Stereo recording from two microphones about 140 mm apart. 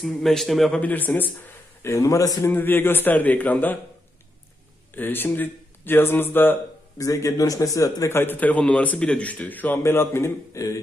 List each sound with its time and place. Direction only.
0.0 s a man's voice: centre (ahead or behind)
0.7 s speech: 10° left (ahead or behind)
4.9 s speech: 15° left (ahead or behind)